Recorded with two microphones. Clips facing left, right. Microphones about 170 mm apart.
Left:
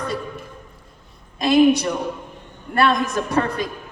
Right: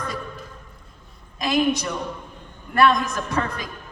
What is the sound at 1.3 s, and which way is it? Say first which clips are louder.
Speech: left 6 dB; 30° left (ahead or behind).